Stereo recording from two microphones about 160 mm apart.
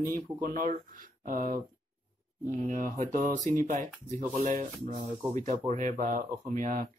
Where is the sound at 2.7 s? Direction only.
55° right (ahead or behind).